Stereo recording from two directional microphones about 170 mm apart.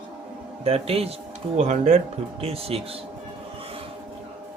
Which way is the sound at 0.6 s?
35° right (ahead or behind).